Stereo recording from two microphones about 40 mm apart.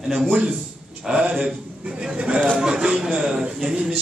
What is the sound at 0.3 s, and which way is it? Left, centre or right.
A man's voice, right.